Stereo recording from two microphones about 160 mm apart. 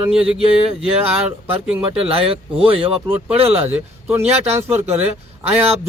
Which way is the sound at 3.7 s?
15° right (ahead or behind).